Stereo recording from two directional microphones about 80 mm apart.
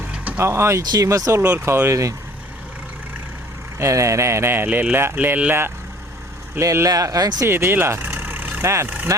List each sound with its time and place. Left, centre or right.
0.3 s speech: right
0.8 s speech: right
1.4 s speech: right
3.8 s speech: right
6.6 s speech: right
7.4 s speech: right